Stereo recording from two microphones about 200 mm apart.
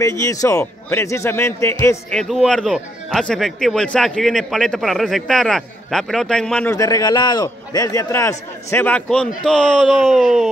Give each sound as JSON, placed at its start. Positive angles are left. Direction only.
{"t": 0.0, "sound": "a man's voice", "side_deg": 15}
{"t": 2.1, "sound": "speech", "side_deg": 0}
{"t": 6.7, "sound": "a man's voice", "side_deg": 15}